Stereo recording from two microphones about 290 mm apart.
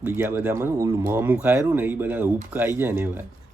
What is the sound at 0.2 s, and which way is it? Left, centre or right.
Speech, centre.